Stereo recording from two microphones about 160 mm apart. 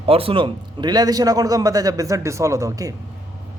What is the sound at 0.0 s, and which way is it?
Speech, 35° right (ahead or behind).